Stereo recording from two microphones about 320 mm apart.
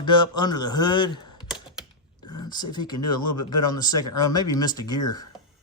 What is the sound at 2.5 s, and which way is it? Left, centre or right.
Speech, centre.